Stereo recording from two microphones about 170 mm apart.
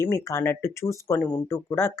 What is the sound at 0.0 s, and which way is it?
Speech, 15° left (ahead or behind).